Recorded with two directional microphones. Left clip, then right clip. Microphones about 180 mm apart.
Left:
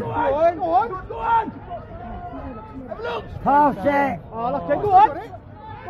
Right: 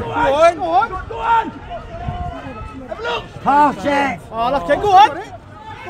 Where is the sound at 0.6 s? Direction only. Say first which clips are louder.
Right 4 dB; 50° left (ahead or behind).